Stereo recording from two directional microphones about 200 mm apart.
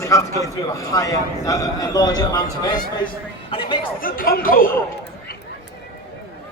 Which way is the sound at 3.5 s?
25° left (ahead or behind).